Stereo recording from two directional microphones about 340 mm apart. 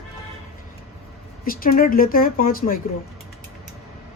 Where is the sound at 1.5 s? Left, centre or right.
Left.